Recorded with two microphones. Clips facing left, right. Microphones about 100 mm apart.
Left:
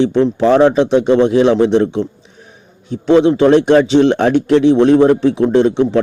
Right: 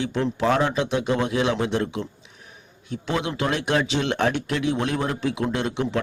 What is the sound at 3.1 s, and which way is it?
A man's voice, 30° left (ahead or behind).